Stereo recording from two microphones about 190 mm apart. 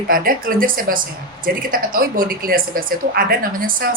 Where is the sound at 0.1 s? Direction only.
50° right (ahead or behind).